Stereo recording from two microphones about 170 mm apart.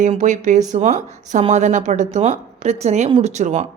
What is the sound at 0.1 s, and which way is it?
A woman's voice, 45° right (ahead or behind).